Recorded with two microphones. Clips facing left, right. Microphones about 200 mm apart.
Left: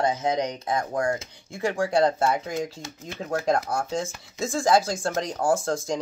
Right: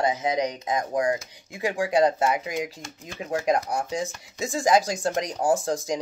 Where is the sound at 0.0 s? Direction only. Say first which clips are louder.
Even; 15° right (ahead or behind).